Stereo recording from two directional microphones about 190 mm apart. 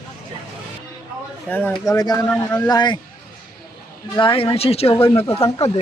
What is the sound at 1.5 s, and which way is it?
Speech, 10° left (ahead or behind).